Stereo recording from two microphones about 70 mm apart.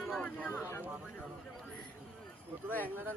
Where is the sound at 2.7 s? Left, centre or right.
Left.